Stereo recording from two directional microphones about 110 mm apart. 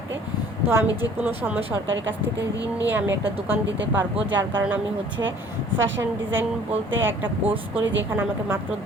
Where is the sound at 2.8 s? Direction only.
20° right (ahead or behind).